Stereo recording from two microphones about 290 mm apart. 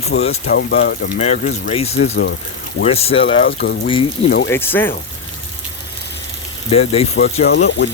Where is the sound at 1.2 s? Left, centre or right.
Left.